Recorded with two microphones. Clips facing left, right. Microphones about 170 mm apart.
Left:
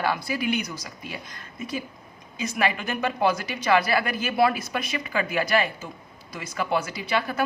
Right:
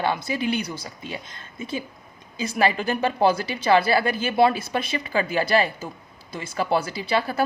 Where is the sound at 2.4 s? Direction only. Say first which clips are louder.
Right 4 dB; 30° right (ahead or behind).